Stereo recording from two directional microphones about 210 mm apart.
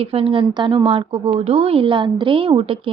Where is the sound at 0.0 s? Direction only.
25° right (ahead or behind).